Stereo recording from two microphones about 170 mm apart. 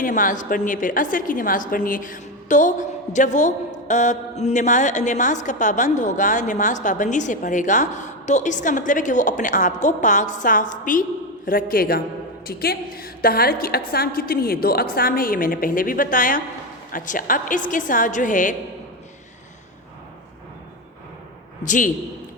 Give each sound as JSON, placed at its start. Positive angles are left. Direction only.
{"t": 0.0, "sound": "a woman's voice", "side_deg": 50}
{"t": 21.6, "sound": "a man's voice", "side_deg": 45}